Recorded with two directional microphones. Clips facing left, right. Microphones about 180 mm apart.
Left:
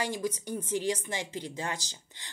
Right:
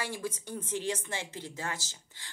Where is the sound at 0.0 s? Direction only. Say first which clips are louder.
Left 4 dB; 15° left (ahead or behind).